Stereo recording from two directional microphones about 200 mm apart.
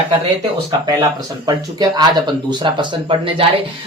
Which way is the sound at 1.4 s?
20° right (ahead or behind).